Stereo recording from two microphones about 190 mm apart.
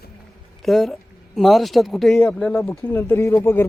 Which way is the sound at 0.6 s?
Centre (ahead or behind).